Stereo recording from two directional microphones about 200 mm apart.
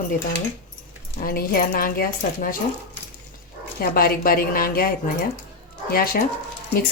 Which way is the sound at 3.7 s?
45° left (ahead or behind).